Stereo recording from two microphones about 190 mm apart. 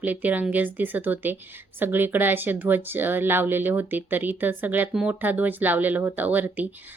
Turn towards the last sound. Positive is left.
turn(degrees=-10)  # may be behind; listen again after turning